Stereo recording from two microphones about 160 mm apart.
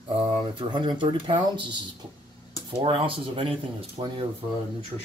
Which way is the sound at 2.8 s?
35° right (ahead or behind).